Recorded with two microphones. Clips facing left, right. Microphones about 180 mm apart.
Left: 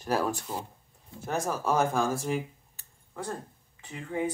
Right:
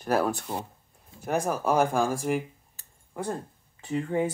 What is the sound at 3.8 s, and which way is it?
Speech, 40° right (ahead or behind).